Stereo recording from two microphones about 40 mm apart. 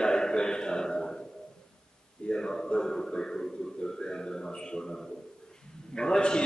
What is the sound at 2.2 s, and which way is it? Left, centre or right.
A man's voice, centre.